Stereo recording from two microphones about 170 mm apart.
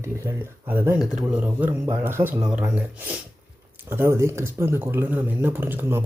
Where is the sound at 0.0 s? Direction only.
15° right (ahead or behind).